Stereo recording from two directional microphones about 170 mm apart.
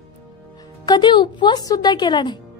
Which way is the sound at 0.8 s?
25° left (ahead or behind).